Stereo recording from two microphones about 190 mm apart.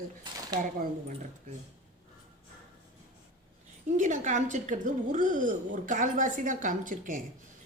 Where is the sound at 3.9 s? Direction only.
40° right (ahead or behind).